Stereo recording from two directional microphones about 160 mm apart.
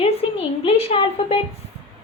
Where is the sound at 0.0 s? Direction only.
35° left (ahead or behind).